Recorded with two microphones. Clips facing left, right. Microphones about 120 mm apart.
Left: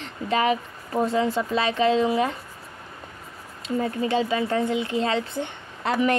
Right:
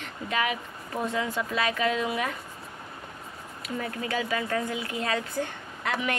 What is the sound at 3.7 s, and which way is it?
Speech, 25° left (ahead or behind).